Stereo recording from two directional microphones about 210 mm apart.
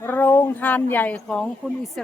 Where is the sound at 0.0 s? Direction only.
10° left (ahead or behind).